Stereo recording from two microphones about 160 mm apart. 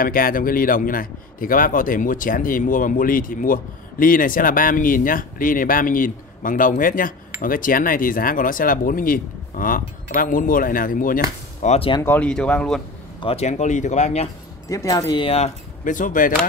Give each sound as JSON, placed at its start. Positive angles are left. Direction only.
{"t": 0.0, "sound": "a man's voice", "side_deg": 60}
{"t": 11.6, "sound": "speech", "side_deg": 45}
{"t": 12.0, "sound": "speech", "side_deg": 10}
{"t": 13.2, "sound": "speech", "side_deg": 40}
{"t": 14.7, "sound": "speech", "side_deg": 20}
{"t": 15.2, "sound": "speech", "side_deg": 40}